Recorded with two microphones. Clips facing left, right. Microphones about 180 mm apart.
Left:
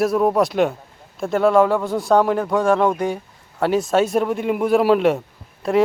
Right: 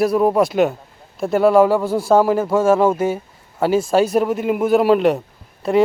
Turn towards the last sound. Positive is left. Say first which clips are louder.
# right 2 dB
turn(degrees=0)  # may be behind; listen again after turning